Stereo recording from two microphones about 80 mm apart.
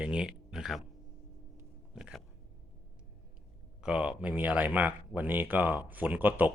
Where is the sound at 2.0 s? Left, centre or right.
Centre.